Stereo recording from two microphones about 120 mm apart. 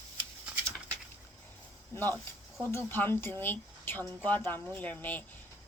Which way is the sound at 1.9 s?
15° left (ahead or behind).